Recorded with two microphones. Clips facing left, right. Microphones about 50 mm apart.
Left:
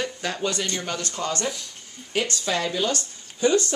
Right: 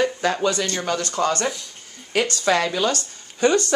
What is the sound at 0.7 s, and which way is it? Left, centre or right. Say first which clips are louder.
Speech: right 6 dB; right.